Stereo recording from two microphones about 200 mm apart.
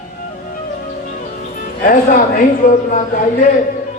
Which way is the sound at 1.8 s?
40° left (ahead or behind).